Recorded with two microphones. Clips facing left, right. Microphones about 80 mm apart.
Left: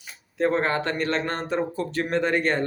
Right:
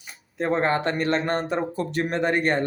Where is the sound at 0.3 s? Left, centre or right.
Right.